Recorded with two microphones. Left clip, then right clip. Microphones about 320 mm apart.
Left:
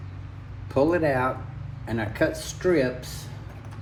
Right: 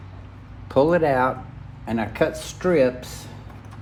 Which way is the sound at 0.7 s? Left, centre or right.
Right.